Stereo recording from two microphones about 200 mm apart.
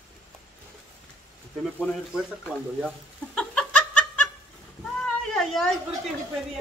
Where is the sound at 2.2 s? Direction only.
Centre (ahead or behind).